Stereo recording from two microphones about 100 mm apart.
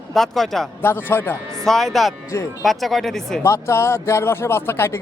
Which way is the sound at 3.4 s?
25° left (ahead or behind).